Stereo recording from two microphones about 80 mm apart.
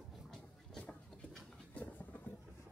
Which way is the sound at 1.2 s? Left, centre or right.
Centre.